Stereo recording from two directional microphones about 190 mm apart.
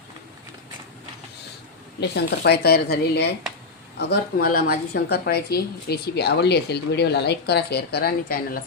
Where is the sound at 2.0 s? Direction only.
60° left (ahead or behind).